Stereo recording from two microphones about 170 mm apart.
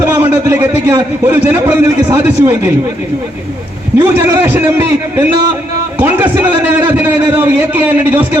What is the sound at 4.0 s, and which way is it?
A man's voice, 10° right (ahead or behind).